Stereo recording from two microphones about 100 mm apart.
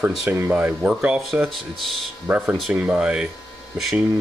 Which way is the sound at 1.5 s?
Centre (ahead or behind).